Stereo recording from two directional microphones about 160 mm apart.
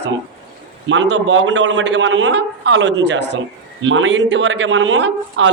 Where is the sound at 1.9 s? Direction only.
90° right.